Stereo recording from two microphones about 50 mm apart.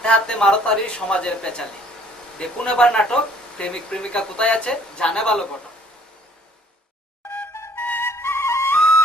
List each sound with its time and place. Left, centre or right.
0.0 s speech: centre
7.8 s flute: left
8.0 s flute: left